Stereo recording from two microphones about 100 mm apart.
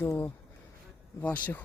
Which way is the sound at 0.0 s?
25° left (ahead or behind).